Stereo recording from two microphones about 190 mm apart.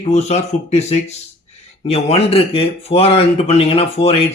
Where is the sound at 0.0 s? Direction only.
35° left (ahead or behind).